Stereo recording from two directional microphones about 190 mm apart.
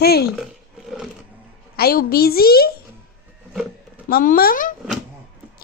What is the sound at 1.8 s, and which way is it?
Speech, 50° left (ahead or behind).